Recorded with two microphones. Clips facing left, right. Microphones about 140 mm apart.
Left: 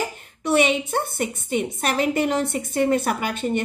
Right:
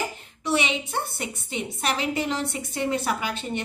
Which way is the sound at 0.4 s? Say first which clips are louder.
Left 6 dB; 50° left (ahead or behind).